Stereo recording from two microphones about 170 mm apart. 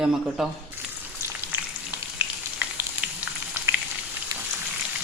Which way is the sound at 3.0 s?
10° right (ahead or behind).